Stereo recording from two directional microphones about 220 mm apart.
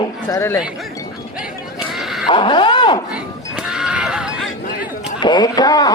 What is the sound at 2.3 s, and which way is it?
Speech, 20° left (ahead or behind).